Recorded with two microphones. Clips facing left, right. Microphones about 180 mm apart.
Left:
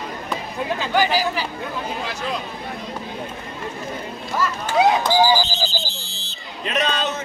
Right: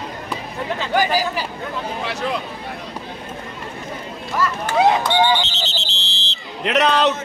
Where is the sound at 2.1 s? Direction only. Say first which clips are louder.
Right 3 dB; 75° right (ahead or behind).